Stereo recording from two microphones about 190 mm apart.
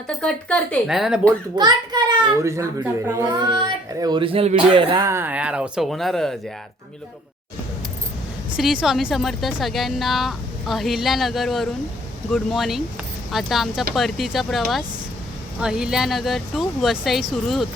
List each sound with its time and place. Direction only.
0.2 s speech: 5° left (ahead or behind)
1.5 s a child's voice: 20° right (ahead or behind)
5.0 s speech: 10° right (ahead or behind)
8.5 s speech: 5° right (ahead or behind)